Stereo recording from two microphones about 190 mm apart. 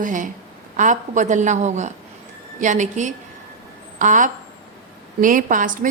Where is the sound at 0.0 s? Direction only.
45° right (ahead or behind).